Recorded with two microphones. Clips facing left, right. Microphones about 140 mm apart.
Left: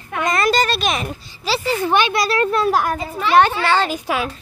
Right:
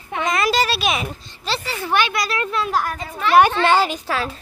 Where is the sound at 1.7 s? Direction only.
20° left (ahead or behind); by 2.7 s 40° left (ahead or behind).